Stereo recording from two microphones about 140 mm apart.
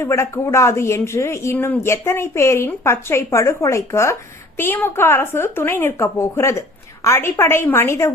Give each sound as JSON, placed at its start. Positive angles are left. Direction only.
{"t": 0.0, "sound": "a woman's voice", "side_deg": 20}